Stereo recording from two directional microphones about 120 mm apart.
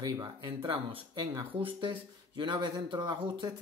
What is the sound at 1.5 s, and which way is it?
Speech, 45° right (ahead or behind).